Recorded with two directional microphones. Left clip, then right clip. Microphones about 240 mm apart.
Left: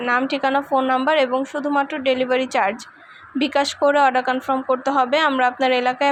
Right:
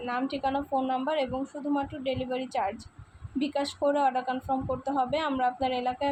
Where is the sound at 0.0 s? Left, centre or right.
Centre.